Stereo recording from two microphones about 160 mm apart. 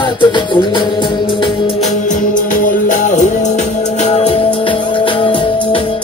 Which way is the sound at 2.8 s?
50° left (ahead or behind).